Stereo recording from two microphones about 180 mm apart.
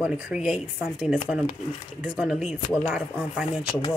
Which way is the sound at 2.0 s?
5° right (ahead or behind).